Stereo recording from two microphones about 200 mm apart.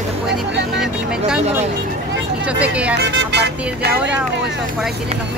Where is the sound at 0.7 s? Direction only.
5° right (ahead or behind).